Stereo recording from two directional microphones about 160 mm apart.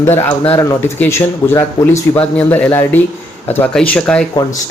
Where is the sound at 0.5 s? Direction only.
15° left (ahead or behind).